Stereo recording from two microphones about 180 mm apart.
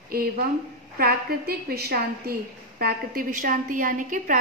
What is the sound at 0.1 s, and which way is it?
A woman's voice, 55° right (ahead or behind).